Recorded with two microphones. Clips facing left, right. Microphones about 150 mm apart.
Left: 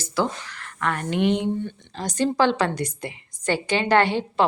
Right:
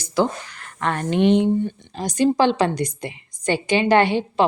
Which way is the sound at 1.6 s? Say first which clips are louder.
Right 4 dB; 15° right (ahead or behind).